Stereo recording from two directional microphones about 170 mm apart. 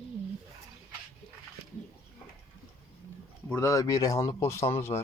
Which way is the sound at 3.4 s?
15° left (ahead or behind).